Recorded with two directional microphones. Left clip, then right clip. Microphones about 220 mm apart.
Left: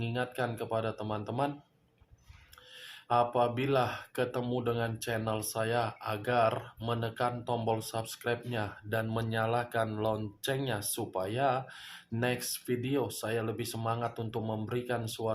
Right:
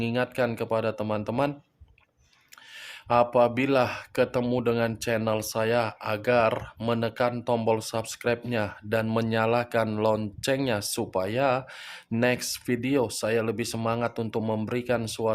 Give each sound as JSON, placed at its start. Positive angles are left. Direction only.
{"t": 0.0, "sound": "speech", "side_deg": -45}
{"t": 3.1, "sound": "speech", "side_deg": -45}